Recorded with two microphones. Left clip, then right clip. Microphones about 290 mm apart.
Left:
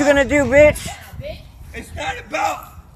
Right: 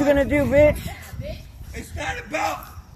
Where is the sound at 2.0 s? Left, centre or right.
Centre.